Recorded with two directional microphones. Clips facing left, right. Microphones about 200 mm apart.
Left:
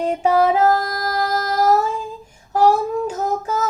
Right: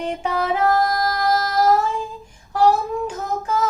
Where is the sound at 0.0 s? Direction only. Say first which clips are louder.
Left 7 dB; 40° left (ahead or behind).